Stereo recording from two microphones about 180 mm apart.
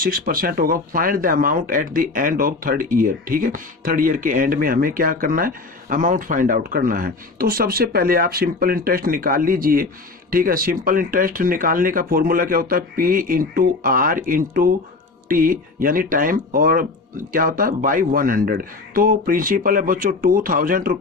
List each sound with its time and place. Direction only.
0.0 s speech: 55° right (ahead or behind)